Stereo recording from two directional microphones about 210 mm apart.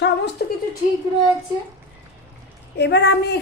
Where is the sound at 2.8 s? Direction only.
55° left (ahead or behind).